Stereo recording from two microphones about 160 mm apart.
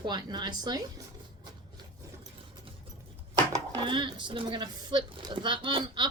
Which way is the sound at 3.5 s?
30° right (ahead or behind).